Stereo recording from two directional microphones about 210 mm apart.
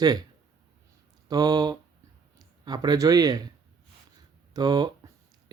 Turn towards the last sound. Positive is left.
turn(degrees=-20)  # may be behind; listen again after turning